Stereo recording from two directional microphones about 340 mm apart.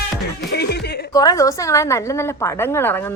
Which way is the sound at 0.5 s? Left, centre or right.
Left.